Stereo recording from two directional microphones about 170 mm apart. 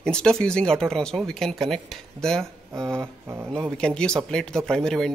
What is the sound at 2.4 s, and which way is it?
Speech, 15° right (ahead or behind).